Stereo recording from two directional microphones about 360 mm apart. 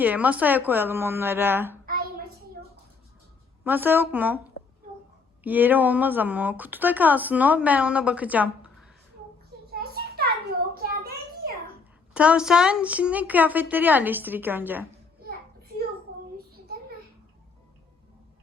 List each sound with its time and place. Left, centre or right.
0.0 s speech: centre
3.6 s speech: centre
4.6 s a sound: left
5.4 s speech: centre
9.8 s a sound: right
12.1 s speech: centre